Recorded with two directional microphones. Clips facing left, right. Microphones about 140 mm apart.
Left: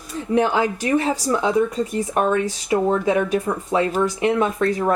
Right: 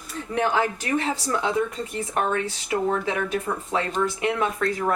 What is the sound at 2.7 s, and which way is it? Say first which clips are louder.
Speech: left 6 dB; 25° left (ahead or behind).